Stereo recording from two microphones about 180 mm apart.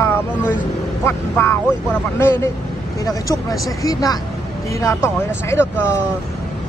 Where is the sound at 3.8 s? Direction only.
20° left (ahead or behind).